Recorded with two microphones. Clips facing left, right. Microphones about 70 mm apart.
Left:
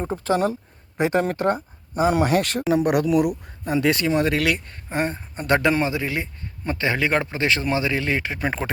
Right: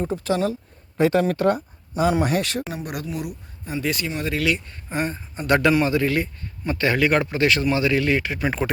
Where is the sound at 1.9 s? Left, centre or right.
Left.